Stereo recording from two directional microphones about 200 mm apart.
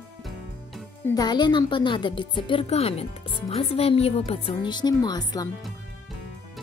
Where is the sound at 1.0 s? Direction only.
20° left (ahead or behind).